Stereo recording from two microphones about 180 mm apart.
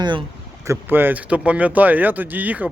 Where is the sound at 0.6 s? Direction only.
10° right (ahead or behind).